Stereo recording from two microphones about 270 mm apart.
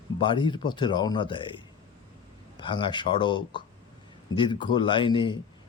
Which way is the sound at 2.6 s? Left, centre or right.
Centre.